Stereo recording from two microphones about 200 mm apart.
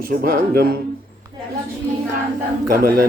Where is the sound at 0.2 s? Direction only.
45° right (ahead or behind).